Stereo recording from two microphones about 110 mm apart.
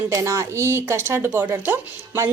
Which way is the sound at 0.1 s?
30° right (ahead or behind).